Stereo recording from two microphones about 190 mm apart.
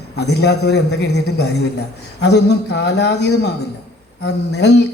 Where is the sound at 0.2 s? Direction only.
60° left (ahead or behind).